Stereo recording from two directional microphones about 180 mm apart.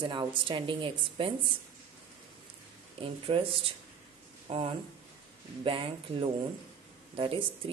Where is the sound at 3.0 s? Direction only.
30° right (ahead or behind).